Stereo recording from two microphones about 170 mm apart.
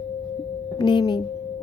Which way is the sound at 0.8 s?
25° left (ahead or behind).